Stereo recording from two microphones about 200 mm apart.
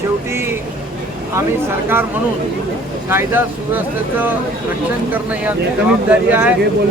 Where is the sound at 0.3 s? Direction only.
10° right (ahead or behind).